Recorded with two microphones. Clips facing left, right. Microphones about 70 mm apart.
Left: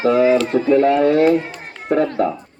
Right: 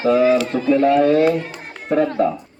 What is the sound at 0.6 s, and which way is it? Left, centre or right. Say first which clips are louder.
Speech: left 2 dB; left.